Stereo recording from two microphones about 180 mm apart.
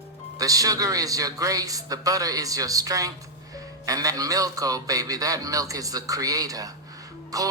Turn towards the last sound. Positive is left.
turn(degrees=-20)  # may be behind; listen again after turning